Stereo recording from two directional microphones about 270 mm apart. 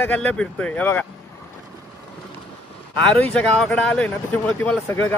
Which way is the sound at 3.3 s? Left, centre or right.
Centre.